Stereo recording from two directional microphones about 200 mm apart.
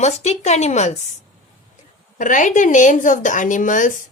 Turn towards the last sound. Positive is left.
turn(degrees=40)  # may be behind; listen again after turning